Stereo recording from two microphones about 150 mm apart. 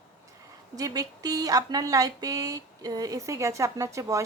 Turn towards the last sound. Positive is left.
turn(degrees=-20)  # may be behind; listen again after turning